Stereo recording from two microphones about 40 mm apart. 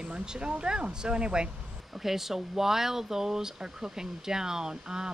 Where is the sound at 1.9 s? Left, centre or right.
Centre.